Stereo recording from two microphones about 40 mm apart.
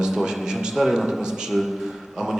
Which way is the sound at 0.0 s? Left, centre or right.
Centre.